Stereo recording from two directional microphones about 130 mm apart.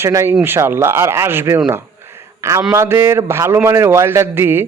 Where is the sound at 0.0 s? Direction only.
20° right (ahead or behind).